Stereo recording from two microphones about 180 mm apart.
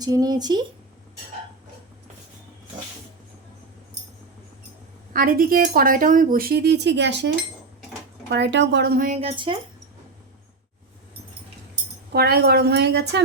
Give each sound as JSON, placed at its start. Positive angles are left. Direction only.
{"t": 0.0, "sound": "speech", "side_deg": -20}
{"t": 5.1, "sound": "a woman's voice", "side_deg": -55}
{"t": 9.0, "sound": "speech", "side_deg": -30}
{"t": 12.1, "sound": "speech", "side_deg": -60}